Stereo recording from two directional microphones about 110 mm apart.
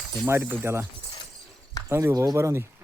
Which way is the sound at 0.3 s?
20° right (ahead or behind).